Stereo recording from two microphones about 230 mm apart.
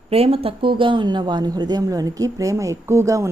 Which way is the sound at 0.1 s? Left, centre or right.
Right.